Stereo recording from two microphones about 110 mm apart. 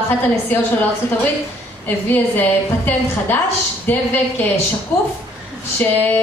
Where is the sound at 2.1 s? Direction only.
15° left (ahead or behind).